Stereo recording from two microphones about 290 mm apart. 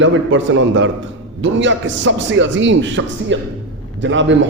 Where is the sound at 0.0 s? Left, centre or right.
Right.